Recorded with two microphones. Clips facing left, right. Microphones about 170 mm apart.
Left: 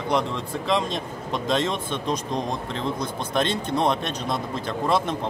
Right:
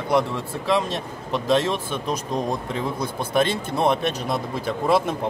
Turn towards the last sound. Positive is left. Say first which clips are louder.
# right 3 dB
turn(degrees=-10)  # may be behind; listen again after turning